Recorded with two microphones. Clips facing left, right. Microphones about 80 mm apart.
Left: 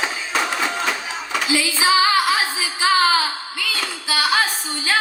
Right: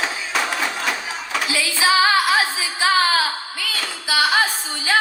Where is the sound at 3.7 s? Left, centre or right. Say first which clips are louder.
Left 1 dB; left.